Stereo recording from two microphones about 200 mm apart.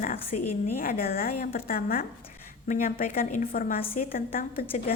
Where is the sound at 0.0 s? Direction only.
45° left (ahead or behind).